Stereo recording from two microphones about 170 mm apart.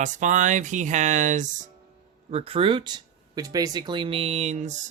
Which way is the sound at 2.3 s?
35° right (ahead or behind).